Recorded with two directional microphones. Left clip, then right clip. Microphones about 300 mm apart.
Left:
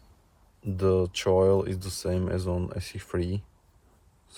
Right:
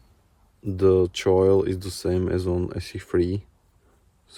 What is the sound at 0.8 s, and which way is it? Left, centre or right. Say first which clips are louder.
Speech: right 6 dB; right.